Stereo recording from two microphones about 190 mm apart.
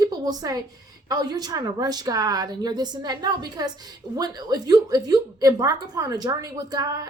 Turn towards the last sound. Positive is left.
turn(degrees=-20)  # may be behind; listen again after turning